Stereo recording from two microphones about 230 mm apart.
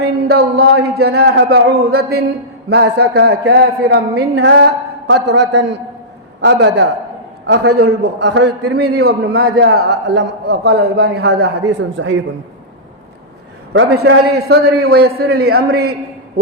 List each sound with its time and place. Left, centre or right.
0.0 s a woman's voice: right
13.7 s a woman's voice: right